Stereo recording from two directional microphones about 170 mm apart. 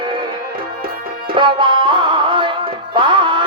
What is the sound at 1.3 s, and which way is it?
Music, 30° right (ahead or behind).